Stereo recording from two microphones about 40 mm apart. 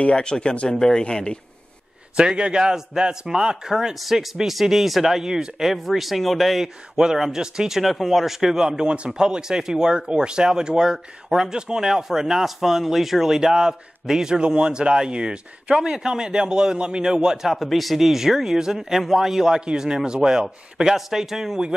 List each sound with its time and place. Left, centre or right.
0.1 s speech: left
2.1 s speech: right
3.7 s speech: centre
5.7 s speech: centre
7.8 s speech: centre
8.6 s speech: right
19.6 s speech: right